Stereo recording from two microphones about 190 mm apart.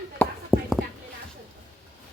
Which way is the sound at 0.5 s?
Centre (ahead or behind).